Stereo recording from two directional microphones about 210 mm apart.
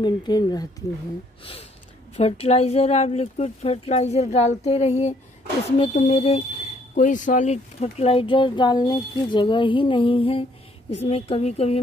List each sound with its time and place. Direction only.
0.0 s speech: 20° left (ahead or behind)